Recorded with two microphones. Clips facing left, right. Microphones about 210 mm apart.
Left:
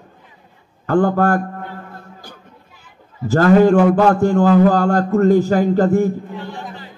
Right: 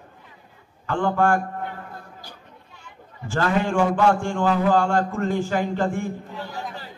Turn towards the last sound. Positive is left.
turn(degrees=40)  # may be behind; listen again after turning